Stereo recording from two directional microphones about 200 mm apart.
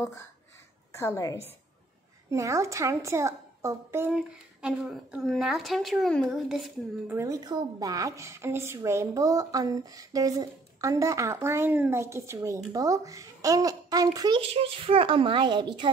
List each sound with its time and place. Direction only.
0.0 s a woman's voice: 15° left (ahead or behind)
2.2 s a woman's voice: 15° right (ahead or behind)
7.2 s a child's voice: 15° right (ahead or behind)